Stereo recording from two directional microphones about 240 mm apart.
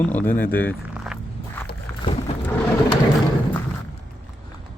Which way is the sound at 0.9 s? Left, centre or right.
Centre.